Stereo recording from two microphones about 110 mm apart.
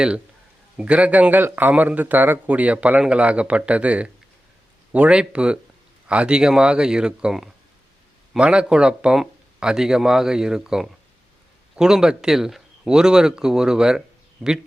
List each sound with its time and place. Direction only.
0.8 s speech: 10° right (ahead or behind)